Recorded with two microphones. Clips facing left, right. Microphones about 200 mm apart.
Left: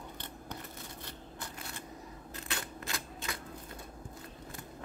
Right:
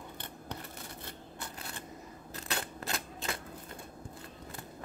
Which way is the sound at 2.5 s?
35° right (ahead or behind).